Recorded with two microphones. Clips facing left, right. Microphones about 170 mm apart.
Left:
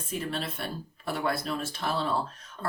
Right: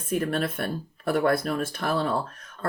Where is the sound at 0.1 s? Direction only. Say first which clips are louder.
Right 7 dB; 55° right (ahead or behind).